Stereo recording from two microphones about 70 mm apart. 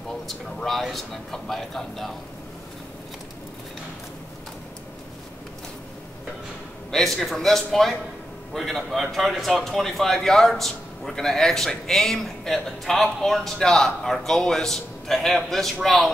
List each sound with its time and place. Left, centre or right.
0.3 s speech: centre
6.9 s speech: centre